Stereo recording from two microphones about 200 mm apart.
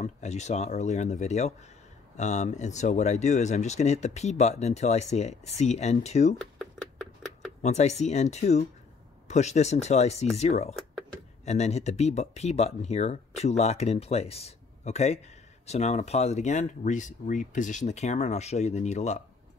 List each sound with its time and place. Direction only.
0.0 s speech: 35° left (ahead or behind)
6.3 s a sound: centre (ahead or behind)
7.6 s speech: 35° left (ahead or behind)